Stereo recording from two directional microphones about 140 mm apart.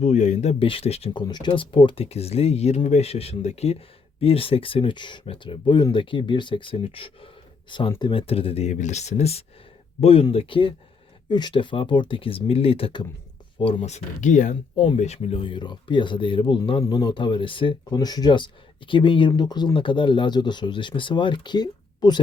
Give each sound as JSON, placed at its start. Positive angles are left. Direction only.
{"t": 0.0, "sound": "speech", "side_deg": 55}
{"t": 0.6, "sound": "speech", "side_deg": 40}
{"t": 1.2, "sound": "speech", "side_deg": 30}